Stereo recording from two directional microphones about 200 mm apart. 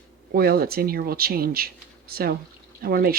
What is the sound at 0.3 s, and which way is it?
Speech, 50° right (ahead or behind).